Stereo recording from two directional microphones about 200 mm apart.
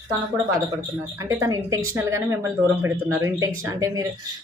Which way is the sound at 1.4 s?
15° right (ahead or behind).